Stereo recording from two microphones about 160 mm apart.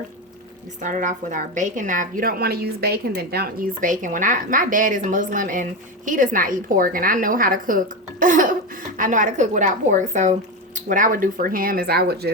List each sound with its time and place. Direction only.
0.8 s a woman's voice: 50° right (ahead or behind); by 12.3 s 80° right